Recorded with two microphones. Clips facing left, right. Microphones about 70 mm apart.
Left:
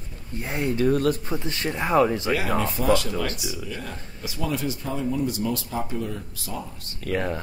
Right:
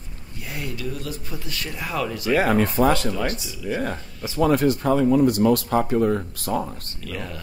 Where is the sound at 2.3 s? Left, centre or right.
Right.